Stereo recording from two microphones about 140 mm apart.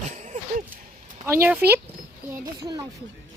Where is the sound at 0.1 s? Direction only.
55° right (ahead or behind).